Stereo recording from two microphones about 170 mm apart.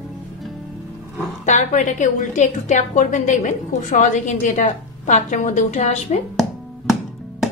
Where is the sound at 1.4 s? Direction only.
45° left (ahead or behind).